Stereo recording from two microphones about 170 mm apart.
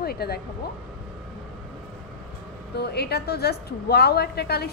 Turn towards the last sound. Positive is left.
turn(degrees=70)  # may be behind; listen again after turning